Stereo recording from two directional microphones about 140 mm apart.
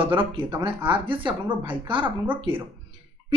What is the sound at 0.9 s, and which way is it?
Speech, 35° right (ahead or behind).